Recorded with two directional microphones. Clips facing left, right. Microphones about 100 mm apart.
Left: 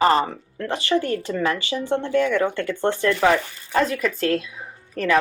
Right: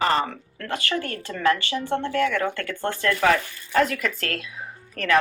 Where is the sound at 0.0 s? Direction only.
30° left (ahead or behind).